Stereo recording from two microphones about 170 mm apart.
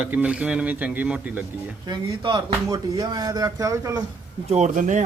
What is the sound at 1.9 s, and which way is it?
Speech, 25° right (ahead or behind).